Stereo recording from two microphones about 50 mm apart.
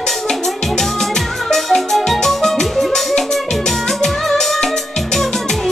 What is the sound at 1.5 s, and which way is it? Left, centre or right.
Music, centre.